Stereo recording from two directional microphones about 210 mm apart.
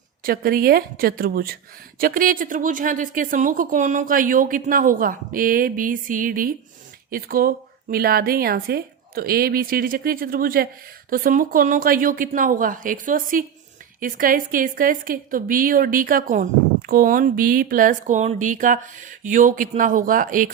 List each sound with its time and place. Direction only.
0.2 s a woman's voice: 45° right (ahead or behind)